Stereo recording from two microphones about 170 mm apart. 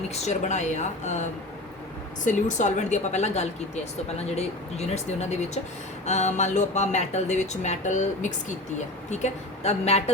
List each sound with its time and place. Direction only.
0.1 s speech: 40° left (ahead or behind)